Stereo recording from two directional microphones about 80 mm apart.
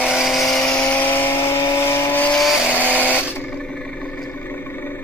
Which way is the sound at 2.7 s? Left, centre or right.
Centre.